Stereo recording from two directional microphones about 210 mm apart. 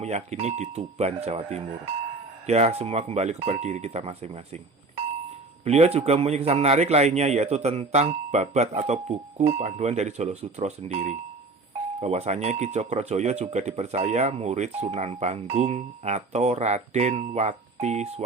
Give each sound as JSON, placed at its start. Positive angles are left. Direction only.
{"t": 0.0, "sound": "speech", "side_deg": -30}